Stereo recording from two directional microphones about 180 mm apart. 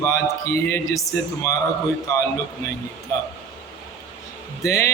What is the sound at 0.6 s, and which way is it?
Speech, 15° left (ahead or behind).